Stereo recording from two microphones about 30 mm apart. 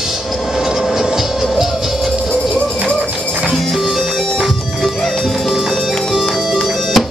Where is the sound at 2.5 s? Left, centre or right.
Left.